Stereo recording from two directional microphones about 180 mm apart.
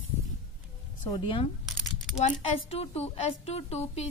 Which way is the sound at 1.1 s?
30° left (ahead or behind).